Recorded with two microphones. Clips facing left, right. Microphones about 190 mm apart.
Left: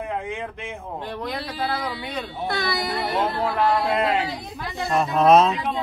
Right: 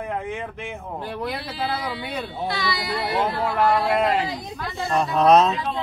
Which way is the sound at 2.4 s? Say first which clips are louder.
Left 2 dB; 50° left (ahead or behind).